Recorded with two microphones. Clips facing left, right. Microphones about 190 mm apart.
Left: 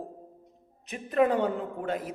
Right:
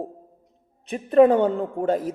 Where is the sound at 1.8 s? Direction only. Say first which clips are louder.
Right 9 dB; 45° right (ahead or behind).